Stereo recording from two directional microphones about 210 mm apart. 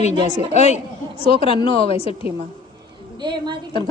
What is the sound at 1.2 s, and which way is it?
Speech, 25° left (ahead or behind).